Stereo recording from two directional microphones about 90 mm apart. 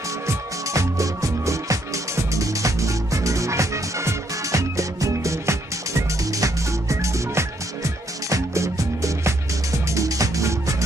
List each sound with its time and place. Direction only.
0.3 s music: 35° right (ahead or behind)